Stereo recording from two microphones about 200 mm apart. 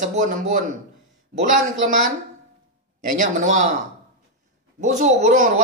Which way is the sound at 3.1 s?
40° right (ahead or behind).